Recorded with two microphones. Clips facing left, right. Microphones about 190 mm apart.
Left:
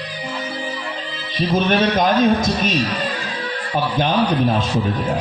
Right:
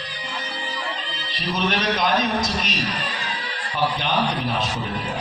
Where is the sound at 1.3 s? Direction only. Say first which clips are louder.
Left 7 dB; 50° left (ahead or behind).